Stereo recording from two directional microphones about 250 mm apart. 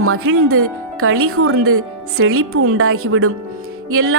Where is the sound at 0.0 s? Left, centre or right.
Right.